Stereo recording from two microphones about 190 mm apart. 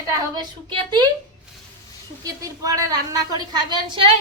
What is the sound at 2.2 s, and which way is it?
A woman's voice, 20° right (ahead or behind).